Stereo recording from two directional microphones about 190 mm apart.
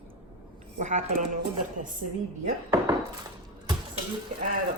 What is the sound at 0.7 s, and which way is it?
Speech, 40° right (ahead or behind).